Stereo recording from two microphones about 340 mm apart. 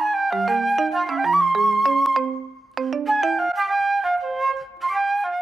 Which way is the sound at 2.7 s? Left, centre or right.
Centre.